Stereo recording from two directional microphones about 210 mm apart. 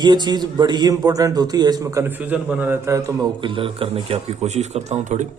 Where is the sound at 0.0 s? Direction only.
20° right (ahead or behind).